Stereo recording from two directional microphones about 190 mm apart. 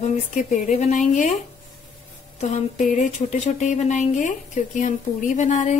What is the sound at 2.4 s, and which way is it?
Speech, 35° left (ahead or behind).